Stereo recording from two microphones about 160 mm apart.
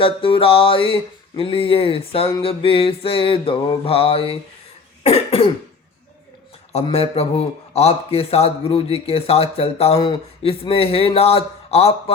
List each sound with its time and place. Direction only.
0.0 s a man's voice: 35° left (ahead or behind)
6.7 s a man's voice: 40° left (ahead or behind)